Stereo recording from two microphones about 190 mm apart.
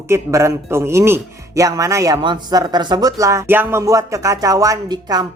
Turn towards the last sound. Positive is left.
turn(degrees=-20)  # may be behind; listen again after turning